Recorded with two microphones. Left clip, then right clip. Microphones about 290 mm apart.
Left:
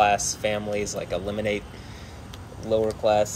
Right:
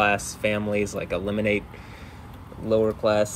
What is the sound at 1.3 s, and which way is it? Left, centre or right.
Speech, right.